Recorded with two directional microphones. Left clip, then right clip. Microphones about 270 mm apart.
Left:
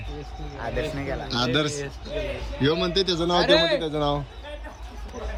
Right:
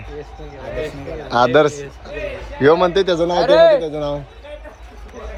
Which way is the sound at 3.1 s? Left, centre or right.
Centre.